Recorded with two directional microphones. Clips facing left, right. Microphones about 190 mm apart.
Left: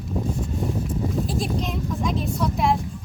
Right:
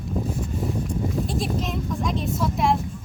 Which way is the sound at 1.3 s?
Centre (ahead or behind).